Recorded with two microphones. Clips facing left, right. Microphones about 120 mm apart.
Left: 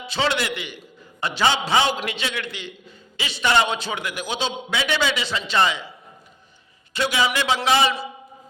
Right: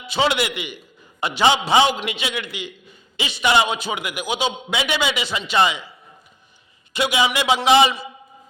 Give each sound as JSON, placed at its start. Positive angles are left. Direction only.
{"t": 0.0, "sound": "a man's voice", "side_deg": -15}
{"t": 6.9, "sound": "a man's voice", "side_deg": -15}